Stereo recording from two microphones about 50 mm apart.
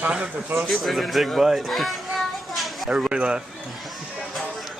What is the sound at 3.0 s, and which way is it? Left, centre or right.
Speech, centre.